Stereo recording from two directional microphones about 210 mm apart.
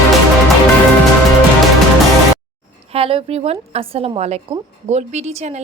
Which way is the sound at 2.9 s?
25° right (ahead or behind).